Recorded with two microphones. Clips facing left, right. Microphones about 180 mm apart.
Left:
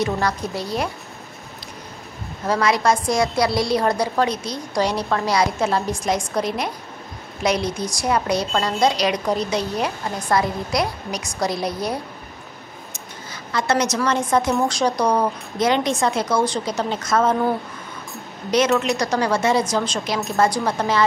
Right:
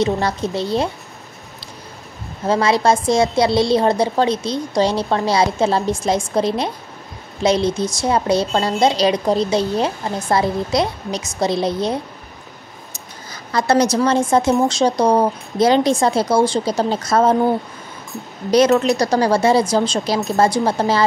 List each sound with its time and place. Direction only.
0.0 s a woman's voice: 25° right (ahead or behind)
2.4 s a woman's voice: 25° right (ahead or behind)
12.9 s a sound: 35° right (ahead or behind)
14.6 s speech: 25° right (ahead or behind)